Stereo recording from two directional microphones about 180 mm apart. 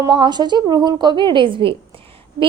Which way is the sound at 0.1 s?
25° right (ahead or behind).